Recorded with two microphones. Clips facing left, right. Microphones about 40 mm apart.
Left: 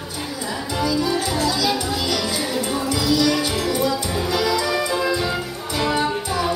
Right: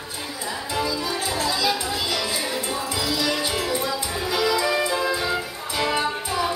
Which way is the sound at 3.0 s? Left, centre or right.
Right.